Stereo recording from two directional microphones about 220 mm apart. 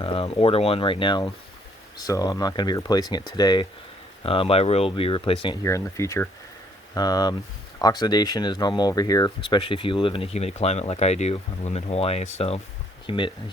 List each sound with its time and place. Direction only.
0.0 s speech: 25° left (ahead or behind)
5.6 s speech: 15° left (ahead or behind)